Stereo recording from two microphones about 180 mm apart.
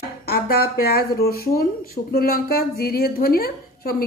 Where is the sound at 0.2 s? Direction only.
60° left (ahead or behind).